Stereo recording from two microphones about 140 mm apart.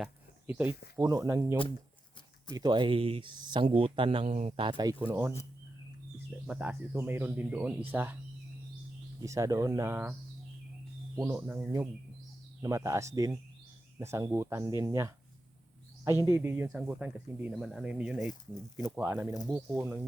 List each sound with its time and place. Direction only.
0.0 s a sound: 10° right (ahead or behind)
0.9 s speech: 25° right (ahead or behind)
2.6 s speech: 35° right (ahead or behind); by 4.6 s 50° right (ahead or behind)
4.6 s speech: 30° right (ahead or behind)
6.5 s speech: 10° right (ahead or behind)
9.2 s speech: 20° right (ahead or behind)
12.6 s speech: 20° right (ahead or behind)
16.2 s speech: 15° right (ahead or behind)